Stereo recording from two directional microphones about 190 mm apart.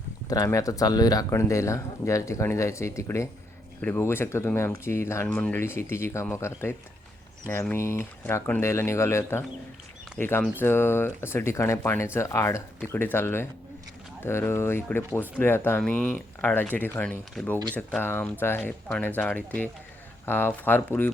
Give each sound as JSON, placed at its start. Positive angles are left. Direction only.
{"t": 0.3, "sound": "speech", "side_deg": 20}